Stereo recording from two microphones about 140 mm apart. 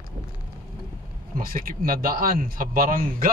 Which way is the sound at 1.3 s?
90° right.